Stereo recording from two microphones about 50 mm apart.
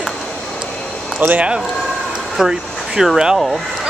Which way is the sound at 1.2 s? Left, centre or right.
Right.